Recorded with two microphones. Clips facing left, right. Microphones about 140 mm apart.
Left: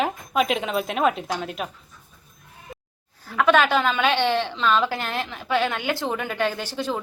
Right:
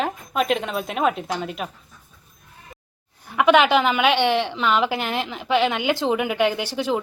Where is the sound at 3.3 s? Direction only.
15° right (ahead or behind).